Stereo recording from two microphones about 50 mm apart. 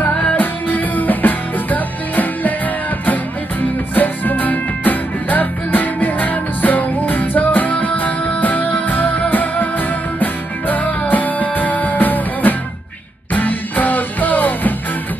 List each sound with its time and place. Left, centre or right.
0.1 s music: left
0.4 s music: left
3.9 s music: left